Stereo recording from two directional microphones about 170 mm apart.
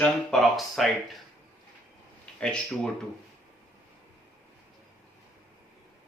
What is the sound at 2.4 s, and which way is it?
Speech, 5° left (ahead or behind).